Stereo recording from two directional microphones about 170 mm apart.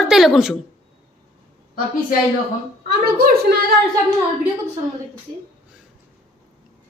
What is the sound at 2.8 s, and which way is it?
Speech, 60° right (ahead or behind).